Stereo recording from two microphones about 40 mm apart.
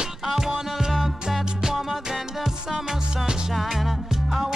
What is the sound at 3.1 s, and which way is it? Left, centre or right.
Music, centre.